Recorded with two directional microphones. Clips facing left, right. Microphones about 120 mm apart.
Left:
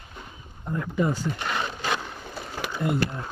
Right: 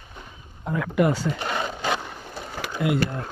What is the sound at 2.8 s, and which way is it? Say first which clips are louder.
Speech: right 3 dB; 75° right (ahead or behind).